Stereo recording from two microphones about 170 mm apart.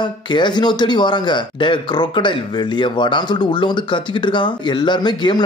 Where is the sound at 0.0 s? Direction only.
25° left (ahead or behind).